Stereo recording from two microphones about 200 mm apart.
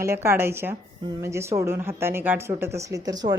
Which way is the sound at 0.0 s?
15° right (ahead or behind).